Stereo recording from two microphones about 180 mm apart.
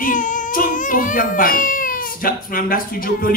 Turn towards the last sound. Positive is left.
turn(degrees=50)  # may be behind; listen again after turning